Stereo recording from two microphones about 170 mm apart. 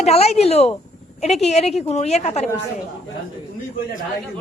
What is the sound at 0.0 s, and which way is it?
Speech, 40° left (ahead or behind).